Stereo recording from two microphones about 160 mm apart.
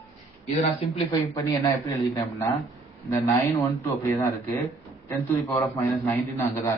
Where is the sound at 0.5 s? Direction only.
35° left (ahead or behind).